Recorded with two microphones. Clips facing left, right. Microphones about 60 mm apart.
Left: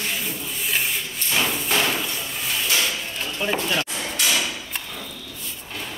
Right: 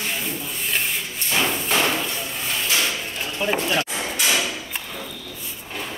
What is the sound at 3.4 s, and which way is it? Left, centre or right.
Speech, centre.